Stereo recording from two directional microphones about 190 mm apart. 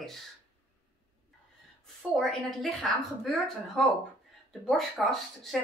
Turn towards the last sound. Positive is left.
turn(degrees=0)  # may be behind; listen again after turning